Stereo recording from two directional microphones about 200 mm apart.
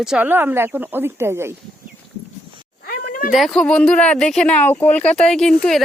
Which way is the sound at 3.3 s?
Centre (ahead or behind).